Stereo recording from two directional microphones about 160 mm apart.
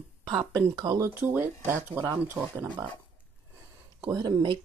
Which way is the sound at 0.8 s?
25° right (ahead or behind).